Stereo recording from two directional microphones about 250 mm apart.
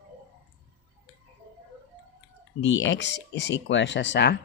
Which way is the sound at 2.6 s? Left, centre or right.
Left.